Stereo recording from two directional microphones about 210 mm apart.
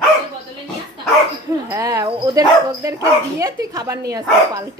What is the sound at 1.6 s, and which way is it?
Speech, 15° right (ahead or behind).